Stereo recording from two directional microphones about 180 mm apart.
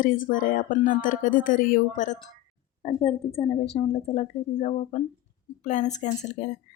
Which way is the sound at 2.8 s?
30° left (ahead or behind).